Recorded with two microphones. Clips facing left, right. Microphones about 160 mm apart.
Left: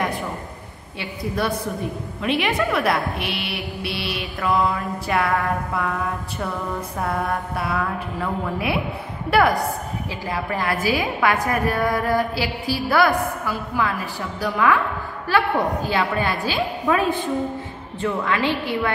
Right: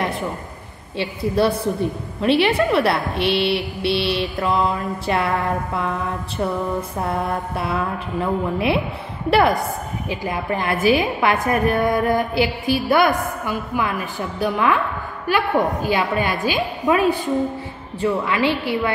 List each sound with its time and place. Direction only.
0.9 s a woman's voice: 30° right (ahead or behind)
7.0 s a woman's voice: 25° right (ahead or behind)